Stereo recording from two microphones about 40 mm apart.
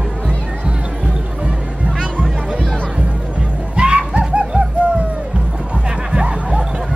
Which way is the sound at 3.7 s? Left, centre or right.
Right.